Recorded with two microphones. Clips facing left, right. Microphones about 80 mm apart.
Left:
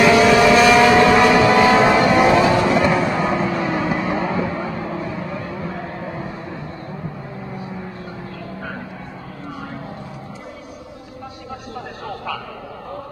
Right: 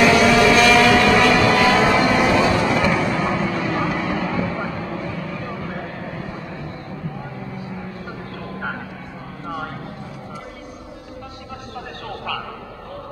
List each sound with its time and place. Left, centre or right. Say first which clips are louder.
0.0 s vehicle: left 2 dB; centre